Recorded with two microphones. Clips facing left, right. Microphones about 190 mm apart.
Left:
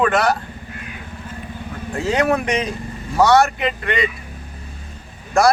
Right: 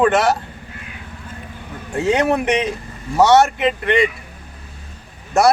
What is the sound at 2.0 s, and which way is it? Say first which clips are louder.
Speech: right 2 dB; 20° right (ahead or behind).